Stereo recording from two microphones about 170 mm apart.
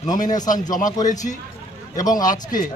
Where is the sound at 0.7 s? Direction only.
50° left (ahead or behind).